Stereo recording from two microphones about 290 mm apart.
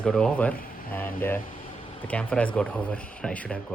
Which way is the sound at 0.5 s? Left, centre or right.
Left.